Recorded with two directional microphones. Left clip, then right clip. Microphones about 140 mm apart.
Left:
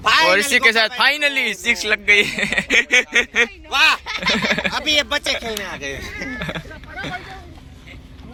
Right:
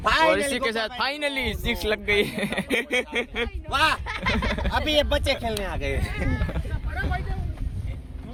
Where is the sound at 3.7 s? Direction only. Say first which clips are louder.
Left 6 dB; 90° right.